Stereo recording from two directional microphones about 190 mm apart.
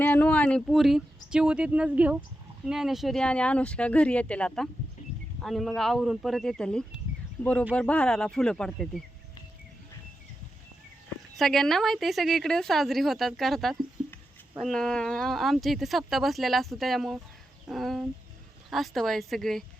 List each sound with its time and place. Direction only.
0.0 s speech: 10° left (ahead or behind)
11.3 s speech: centre (ahead or behind)